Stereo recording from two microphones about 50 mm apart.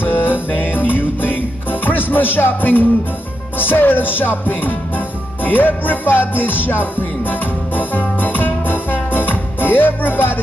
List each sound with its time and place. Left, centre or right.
0.0 s music: left